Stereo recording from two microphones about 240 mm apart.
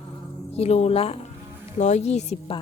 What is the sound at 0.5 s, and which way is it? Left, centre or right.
Speech, left.